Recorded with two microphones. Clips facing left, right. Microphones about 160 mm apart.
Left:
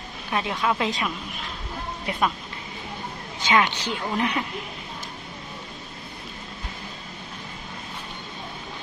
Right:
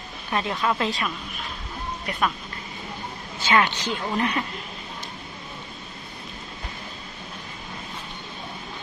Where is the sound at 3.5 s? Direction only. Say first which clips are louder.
Even; 10° left (ahead or behind).